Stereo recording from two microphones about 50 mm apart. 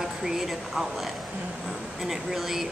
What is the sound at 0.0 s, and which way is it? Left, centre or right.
A woman's voice, centre.